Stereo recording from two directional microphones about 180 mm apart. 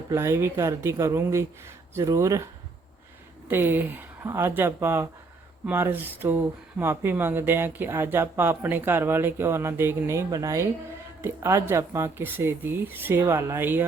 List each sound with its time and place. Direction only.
0.1 s speech: 15° right (ahead or behind)
3.5 s speech: 10° right (ahead or behind)